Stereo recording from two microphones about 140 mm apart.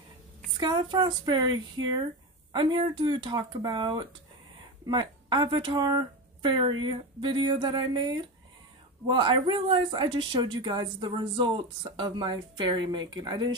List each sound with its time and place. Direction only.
0.6 s speech: 35° right (ahead or behind)